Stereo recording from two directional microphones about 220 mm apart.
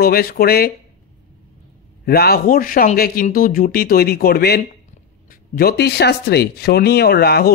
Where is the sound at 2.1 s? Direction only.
45° left (ahead or behind).